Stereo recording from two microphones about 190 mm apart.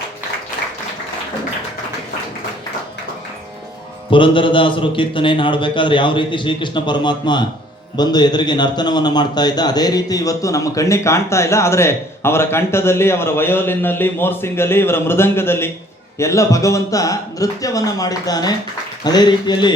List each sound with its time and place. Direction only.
4.1 s a man's voice: 25° left (ahead or behind)